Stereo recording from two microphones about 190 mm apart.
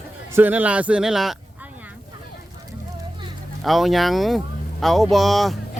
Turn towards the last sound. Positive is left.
turn(degrees=0)  # may be behind; listen again after turning